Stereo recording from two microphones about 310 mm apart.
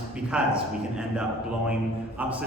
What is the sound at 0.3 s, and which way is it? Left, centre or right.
Speech, centre.